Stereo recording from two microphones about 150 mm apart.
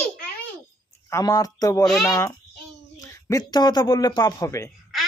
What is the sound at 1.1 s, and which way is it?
Speech, 25° left (ahead or behind).